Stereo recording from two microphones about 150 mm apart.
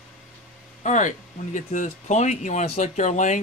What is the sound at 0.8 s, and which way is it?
Speech, 55° left (ahead or behind).